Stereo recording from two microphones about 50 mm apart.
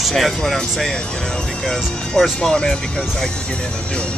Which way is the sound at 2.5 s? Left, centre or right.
Centre.